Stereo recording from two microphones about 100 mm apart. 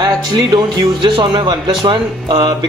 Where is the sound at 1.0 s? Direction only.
55° right (ahead or behind).